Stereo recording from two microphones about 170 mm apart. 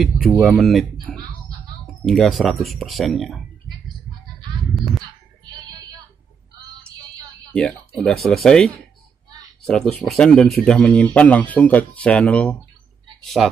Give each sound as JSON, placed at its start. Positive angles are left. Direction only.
{"t": 0.0, "sound": "speech", "side_deg": 0}
{"t": 5.4, "sound": "a sound", "side_deg": -25}
{"t": 8.0, "sound": "speech", "side_deg": 5}